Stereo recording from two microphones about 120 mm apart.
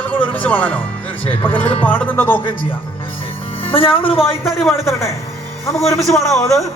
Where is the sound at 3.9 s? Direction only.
50° left (ahead or behind).